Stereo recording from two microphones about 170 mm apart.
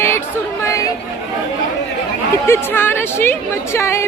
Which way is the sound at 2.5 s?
15° left (ahead or behind).